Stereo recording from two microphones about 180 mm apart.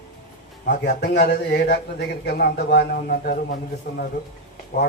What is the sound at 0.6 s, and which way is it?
A man's voice, 65° left (ahead or behind).